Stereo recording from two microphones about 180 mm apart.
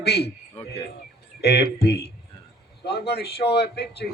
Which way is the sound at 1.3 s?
65° left (ahead or behind).